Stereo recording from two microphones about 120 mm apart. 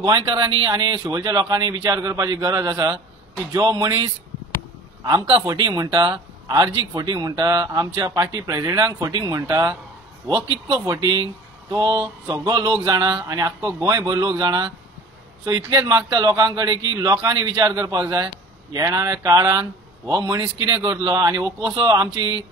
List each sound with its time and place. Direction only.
0.0 s a man's voice: 35° right (ahead or behind)
10.9 s a man's voice: 35° right (ahead or behind)